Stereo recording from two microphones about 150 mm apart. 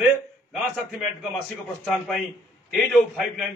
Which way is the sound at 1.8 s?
Centre (ahead or behind).